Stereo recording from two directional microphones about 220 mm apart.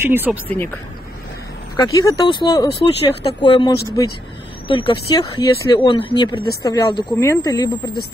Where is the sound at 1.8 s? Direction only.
20° left (ahead or behind).